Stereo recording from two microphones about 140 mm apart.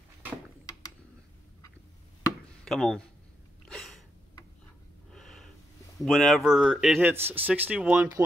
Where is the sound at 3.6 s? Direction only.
Centre (ahead or behind).